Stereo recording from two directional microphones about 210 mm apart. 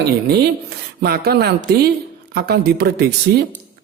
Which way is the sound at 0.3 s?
50° right (ahead or behind).